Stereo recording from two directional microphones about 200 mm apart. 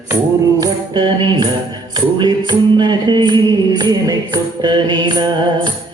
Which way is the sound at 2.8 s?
20° right (ahead or behind).